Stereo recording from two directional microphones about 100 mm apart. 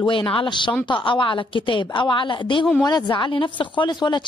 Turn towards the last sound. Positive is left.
turn(degrees=50)  # may be behind; listen again after turning